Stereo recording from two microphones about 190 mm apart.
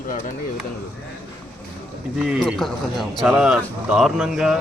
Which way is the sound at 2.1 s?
5° right (ahead or behind).